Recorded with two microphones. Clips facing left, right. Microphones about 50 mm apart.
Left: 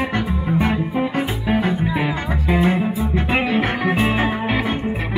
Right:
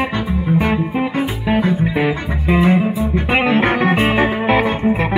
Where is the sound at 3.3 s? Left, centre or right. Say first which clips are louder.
Right 6 dB; right.